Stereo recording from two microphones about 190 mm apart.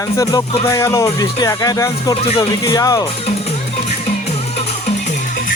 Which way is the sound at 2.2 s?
30° left (ahead or behind).